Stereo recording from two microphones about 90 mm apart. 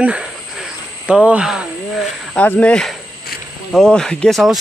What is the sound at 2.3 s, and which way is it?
Speech, 15° left (ahead or behind).